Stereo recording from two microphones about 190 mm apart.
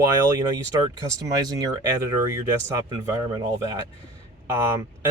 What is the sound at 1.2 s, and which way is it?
Speech, 20° right (ahead or behind).